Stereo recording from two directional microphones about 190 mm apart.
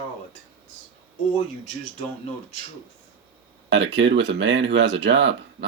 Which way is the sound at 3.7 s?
70° right (ahead or behind).